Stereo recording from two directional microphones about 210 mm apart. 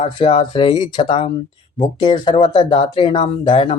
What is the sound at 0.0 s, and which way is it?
Speech, 25° left (ahead or behind).